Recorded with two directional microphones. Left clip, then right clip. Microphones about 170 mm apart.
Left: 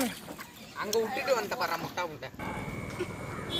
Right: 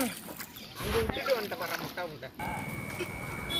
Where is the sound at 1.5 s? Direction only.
50° left (ahead or behind).